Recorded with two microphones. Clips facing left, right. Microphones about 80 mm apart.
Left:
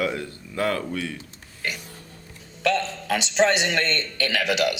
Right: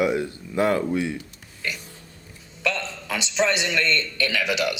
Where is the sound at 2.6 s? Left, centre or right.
Left.